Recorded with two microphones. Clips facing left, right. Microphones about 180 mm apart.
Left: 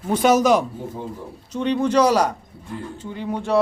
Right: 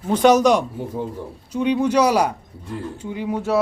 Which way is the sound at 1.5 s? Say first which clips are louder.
Right 1 dB; 10° right (ahead or behind).